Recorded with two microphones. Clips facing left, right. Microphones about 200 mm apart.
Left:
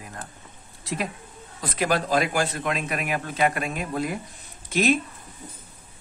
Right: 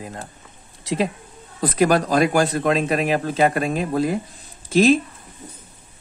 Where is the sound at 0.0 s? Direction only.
25° right (ahead or behind).